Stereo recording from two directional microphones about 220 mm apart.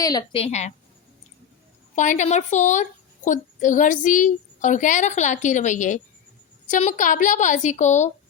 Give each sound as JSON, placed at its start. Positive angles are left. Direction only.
{"t": 0.0, "sound": "a woman's voice", "side_deg": 15}
{"t": 2.0, "sound": "a woman's voice", "side_deg": 35}